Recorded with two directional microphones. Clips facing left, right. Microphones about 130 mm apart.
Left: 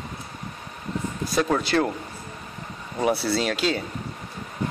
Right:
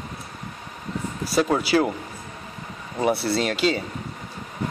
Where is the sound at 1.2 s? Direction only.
5° right (ahead or behind).